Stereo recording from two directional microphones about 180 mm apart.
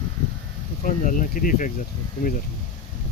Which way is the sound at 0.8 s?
50° left (ahead or behind).